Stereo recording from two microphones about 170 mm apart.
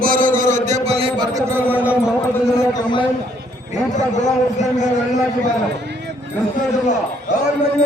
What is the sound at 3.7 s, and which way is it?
A man's voice, 45° left (ahead or behind).